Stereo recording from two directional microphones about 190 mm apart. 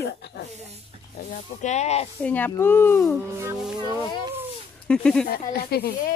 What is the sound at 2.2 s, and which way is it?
Speech, 10° left (ahead or behind).